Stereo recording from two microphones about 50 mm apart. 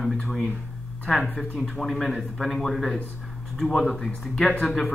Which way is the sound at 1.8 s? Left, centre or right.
Centre.